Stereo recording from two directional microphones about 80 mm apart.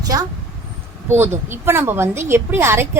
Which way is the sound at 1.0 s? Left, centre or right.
Right.